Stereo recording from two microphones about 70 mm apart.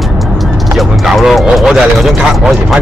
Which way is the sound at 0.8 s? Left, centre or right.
Centre.